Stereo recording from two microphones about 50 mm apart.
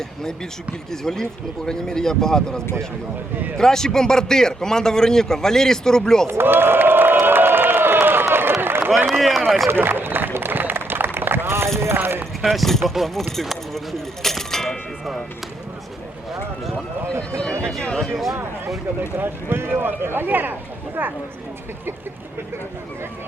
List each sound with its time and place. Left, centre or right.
0.9 s a man's voice: centre
6.2 s crowd: right
8.6 s run: right
9.2 s speech: centre
9.6 s a sound: right
11.9 s clip-clop: right
12.4 s speech: centre
14.2 s music: centre
17.9 s speech: centre
19.1 s speech: right